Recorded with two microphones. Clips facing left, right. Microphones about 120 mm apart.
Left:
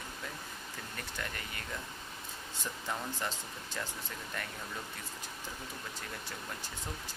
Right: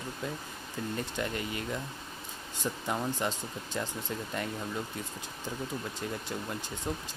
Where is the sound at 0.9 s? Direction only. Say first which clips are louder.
Right 8 dB; 20° right (ahead or behind).